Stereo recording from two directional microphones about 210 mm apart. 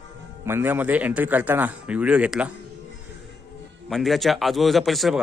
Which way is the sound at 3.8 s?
Centre (ahead or behind).